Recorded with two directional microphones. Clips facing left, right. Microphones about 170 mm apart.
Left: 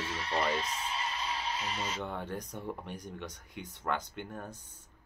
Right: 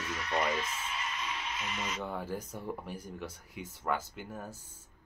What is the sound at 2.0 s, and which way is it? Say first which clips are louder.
Speech: right 1 dB; 5° right (ahead or behind).